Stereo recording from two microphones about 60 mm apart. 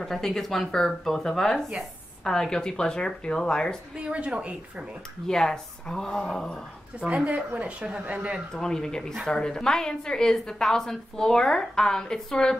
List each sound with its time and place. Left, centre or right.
0.0 s a woman's voice: centre
4.0 s speech: centre
5.2 s a woman's voice: centre
7.0 s speech: centre
8.5 s a woman's voice: centre